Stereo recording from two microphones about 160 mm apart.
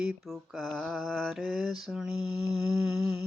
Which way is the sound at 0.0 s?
5° right (ahead or behind).